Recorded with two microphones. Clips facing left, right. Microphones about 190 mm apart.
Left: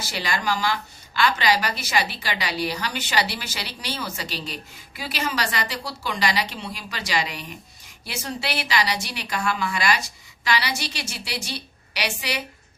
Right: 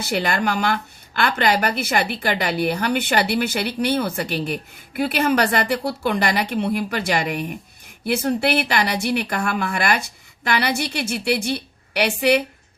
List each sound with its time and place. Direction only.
0.0 s a woman's voice: 60° right (ahead or behind)